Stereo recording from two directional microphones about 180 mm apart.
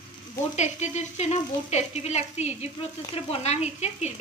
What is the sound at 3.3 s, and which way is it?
Speech, 35° left (ahead or behind).